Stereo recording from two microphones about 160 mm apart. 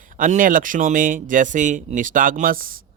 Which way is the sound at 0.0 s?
55° right (ahead or behind).